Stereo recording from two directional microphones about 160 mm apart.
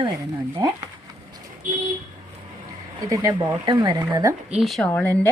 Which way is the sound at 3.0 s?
20° right (ahead or behind).